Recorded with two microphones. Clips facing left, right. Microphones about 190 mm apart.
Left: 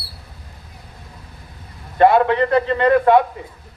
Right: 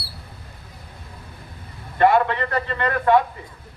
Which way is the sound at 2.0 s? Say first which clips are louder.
Left 4 dB; 15° left (ahead or behind).